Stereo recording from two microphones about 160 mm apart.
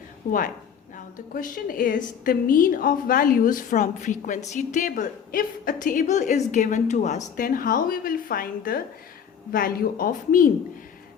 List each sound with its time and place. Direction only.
0.3 s a woman's voice: 60° left (ahead or behind)